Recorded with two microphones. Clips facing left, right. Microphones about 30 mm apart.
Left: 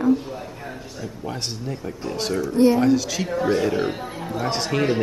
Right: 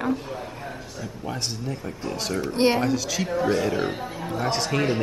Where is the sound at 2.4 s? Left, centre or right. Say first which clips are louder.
Left 4 dB; right.